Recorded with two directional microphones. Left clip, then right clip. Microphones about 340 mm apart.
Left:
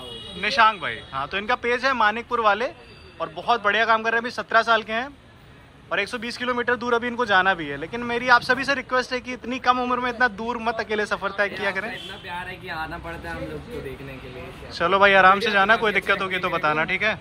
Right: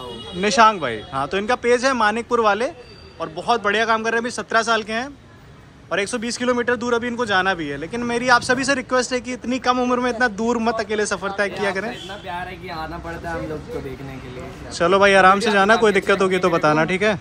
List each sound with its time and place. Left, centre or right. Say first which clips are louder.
0.4 s a man's voice: right 4 dB; centre
14.8 s a man's voice: right 2 dB; centre